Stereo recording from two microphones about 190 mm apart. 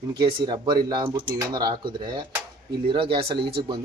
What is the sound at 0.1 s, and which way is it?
A man's voice, 25° right (ahead or behind).